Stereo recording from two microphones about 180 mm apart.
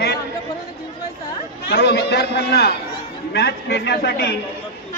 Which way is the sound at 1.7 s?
65° left (ahead or behind).